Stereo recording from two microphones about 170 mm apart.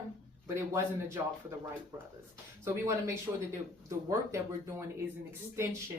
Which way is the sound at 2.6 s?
15° right (ahead or behind).